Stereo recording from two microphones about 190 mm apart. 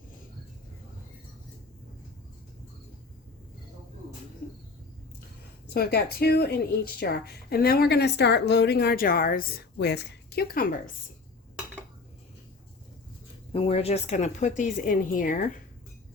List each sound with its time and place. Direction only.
5.6 s speech: 55° left (ahead or behind)
13.5 s speech: 30° left (ahead or behind); by 15.4 s 45° left (ahead or behind)